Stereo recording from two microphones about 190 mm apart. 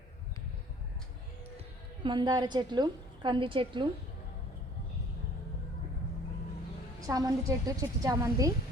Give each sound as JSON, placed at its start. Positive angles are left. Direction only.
{"t": 2.0, "sound": "a woman's voice", "side_deg": -25}
{"t": 7.0, "sound": "a woman's voice", "side_deg": -20}